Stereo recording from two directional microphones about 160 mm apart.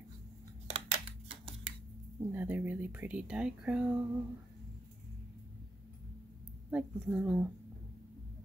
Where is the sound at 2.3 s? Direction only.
10° right (ahead or behind).